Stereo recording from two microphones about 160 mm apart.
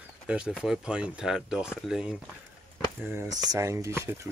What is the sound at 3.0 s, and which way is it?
Speech, 15° right (ahead or behind).